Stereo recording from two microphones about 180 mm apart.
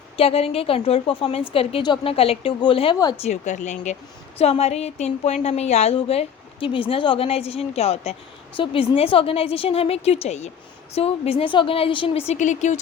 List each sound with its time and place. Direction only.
0.2 s a woman's voice: 35° left (ahead or behind)
3.2 s a woman's voice: 40° left (ahead or behind)